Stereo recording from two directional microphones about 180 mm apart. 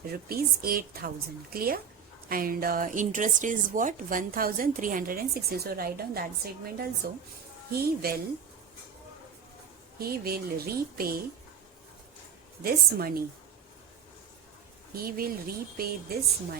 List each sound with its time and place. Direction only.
0.1 s a woman's voice: 55° right (ahead or behind)
10.0 s a woman's voice: 55° right (ahead or behind)
12.6 s a woman's voice: 55° right (ahead or behind)
14.9 s a woman's voice: 55° right (ahead or behind)